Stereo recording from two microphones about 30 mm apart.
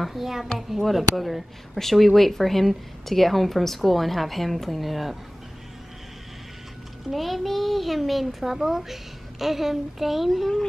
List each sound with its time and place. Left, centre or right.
0.0 s a child's voice: centre
7.1 s a child's voice: centre